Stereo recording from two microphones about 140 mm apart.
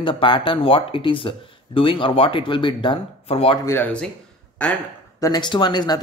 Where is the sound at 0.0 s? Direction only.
35° left (ahead or behind).